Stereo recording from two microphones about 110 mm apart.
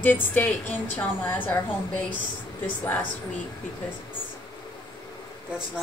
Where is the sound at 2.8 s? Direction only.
15° left (ahead or behind).